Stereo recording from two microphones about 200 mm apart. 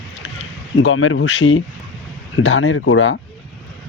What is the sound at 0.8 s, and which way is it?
Speech, 90° left.